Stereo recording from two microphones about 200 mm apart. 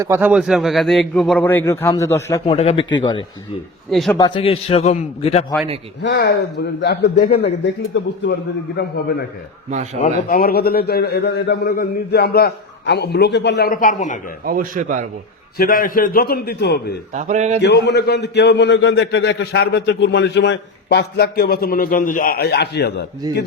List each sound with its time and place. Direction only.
0.0 s a man's voice: 10° right (ahead or behind); by 2.4 s 15° left (ahead or behind)
2.5 s a man's voice: 30° left (ahead or behind)
3.8 s a man's voice: centre (ahead or behind)
4.2 s a man's voice: 25° left (ahead or behind)
6.0 s a man's voice: 60° left (ahead or behind)
9.6 s a man's voice: 35° right (ahead or behind)
10.0 s a man's voice: 45° left (ahead or behind)
14.4 s a man's voice: 45° right (ahead or behind)
15.5 s a man's voice: 45° left (ahead or behind)
17.2 s a man's voice: 35° right (ahead or behind)
17.6 s a man's voice: 60° left (ahead or behind)